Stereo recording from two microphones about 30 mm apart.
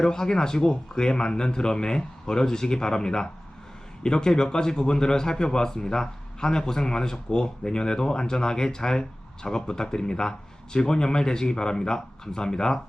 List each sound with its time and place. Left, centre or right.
0.0 s a man's voice: left